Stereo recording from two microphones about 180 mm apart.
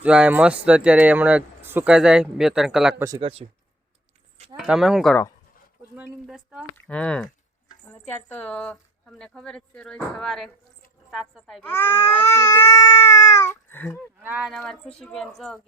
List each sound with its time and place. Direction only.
0.0 s speech: 5° right (ahead or behind)
3.2 s speech: 30° right (ahead or behind)
4.5 s speech: 5° right (ahead or behind)
6.7 s speech: 5° left (ahead or behind)
14.2 s speech: 10° right (ahead or behind)
14.5 s speech: 5° left (ahead or behind)